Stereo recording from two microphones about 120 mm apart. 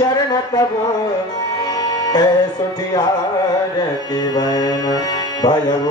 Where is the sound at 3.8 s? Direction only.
35° left (ahead or behind).